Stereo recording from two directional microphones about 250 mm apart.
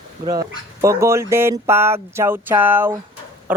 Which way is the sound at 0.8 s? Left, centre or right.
Centre.